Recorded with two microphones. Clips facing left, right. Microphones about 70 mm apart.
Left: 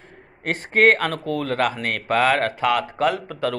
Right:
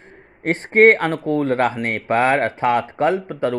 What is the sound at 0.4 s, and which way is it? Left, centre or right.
Speech, right.